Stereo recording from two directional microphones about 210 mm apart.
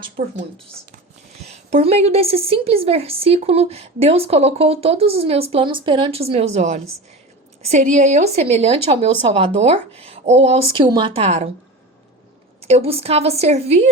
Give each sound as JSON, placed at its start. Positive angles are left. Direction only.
{"t": 0.2, "sound": "a woman's voice", "side_deg": -30}
{"t": 1.5, "sound": "a woman's voice", "side_deg": -30}
{"t": 12.6, "sound": "a woman's voice", "side_deg": -30}